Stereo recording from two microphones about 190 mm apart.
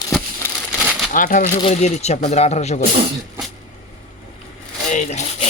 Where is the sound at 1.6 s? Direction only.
35° left (ahead or behind).